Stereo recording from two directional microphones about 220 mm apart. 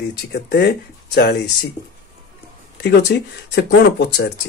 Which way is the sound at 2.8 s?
50° left (ahead or behind).